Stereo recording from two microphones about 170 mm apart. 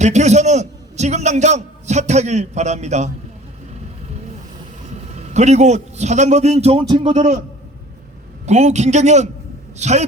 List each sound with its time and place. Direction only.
0.0 s a man's voice: 45° right (ahead or behind)
4.9 s a man's voice: 40° right (ahead or behind)
8.4 s a man's voice: 40° right (ahead or behind)